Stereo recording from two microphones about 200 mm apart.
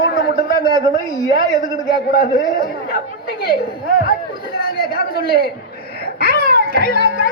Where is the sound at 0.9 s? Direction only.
45° left (ahead or behind).